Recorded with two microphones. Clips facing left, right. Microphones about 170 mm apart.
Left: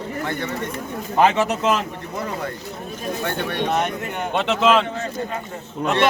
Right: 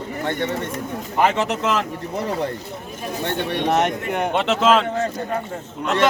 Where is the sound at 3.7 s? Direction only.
75° right (ahead or behind).